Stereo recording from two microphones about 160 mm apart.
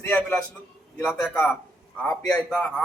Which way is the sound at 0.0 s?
10° left (ahead or behind).